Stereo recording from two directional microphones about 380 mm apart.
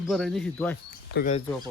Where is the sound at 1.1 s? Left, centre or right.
Left.